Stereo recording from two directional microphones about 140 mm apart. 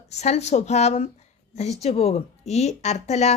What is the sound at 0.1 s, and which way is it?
A woman's voice, 55° left (ahead or behind).